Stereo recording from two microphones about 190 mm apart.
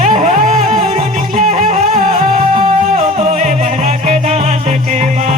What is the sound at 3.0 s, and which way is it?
Music, 35° right (ahead or behind).